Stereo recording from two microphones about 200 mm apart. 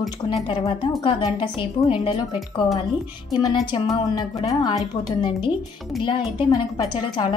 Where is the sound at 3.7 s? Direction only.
20° left (ahead or behind).